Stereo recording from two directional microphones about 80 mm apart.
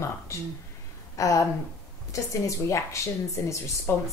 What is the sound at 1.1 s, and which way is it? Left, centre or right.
Speech, left.